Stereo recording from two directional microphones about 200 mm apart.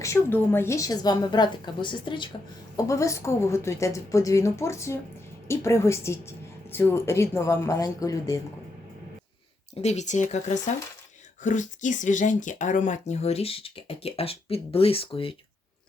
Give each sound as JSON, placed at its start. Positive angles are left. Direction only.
{"t": 0.0, "sound": "a woman's voice", "side_deg": 10}
{"t": 9.8, "sound": "speech", "side_deg": 35}